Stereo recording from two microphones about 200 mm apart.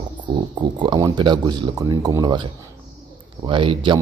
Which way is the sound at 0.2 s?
25° right (ahead or behind).